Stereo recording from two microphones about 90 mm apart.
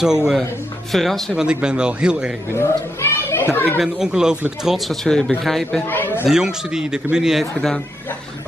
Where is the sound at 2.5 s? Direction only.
30° left (ahead or behind).